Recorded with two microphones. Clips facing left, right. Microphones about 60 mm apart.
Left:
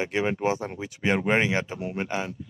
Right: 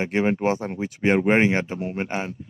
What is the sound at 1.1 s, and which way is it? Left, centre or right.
Speech, right.